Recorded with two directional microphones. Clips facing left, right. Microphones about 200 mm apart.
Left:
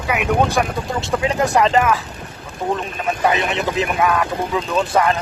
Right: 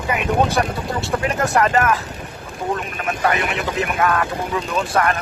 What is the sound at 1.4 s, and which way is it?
Speech, 15° left (ahead or behind).